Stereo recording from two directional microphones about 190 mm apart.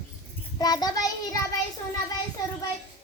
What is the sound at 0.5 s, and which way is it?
Child singing, 20° left (ahead or behind).